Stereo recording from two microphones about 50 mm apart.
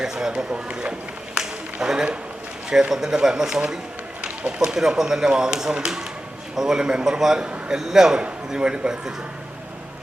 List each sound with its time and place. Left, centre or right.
0.0 s speech: centre
1.4 s a sound: centre
2.6 s a man's voice: centre
4.2 s run: right
4.7 s a man's voice: centre